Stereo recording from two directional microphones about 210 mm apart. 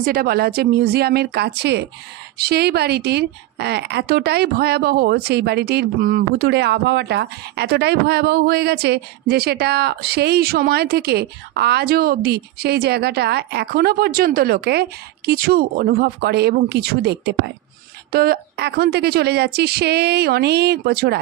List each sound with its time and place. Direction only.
0.0 s speech: 45° right (ahead or behind)